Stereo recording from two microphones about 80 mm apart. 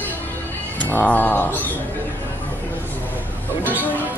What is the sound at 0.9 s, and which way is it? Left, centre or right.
Cat, left.